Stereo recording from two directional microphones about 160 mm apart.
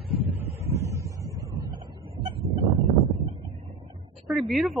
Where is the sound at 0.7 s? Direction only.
20° right (ahead or behind).